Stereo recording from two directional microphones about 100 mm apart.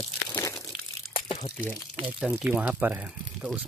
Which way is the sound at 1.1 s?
65° left (ahead or behind).